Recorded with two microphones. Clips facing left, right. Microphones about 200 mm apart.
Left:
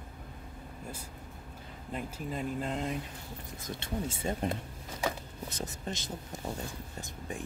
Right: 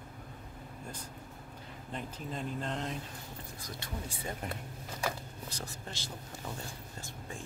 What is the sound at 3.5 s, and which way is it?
Speech, 25° left (ahead or behind).